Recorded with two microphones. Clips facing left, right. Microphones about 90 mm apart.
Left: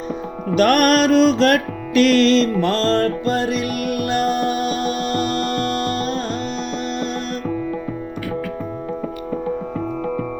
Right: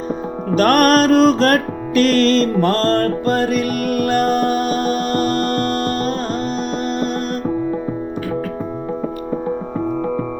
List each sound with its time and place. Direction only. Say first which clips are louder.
0.5 s music: right 2 dB; 40° right (ahead or behind)